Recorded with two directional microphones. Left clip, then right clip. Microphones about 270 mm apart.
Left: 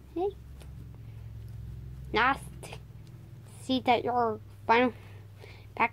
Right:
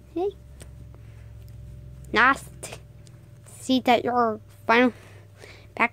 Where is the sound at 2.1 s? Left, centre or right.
Right.